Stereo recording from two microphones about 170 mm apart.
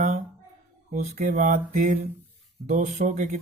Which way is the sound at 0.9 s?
45° right (ahead or behind).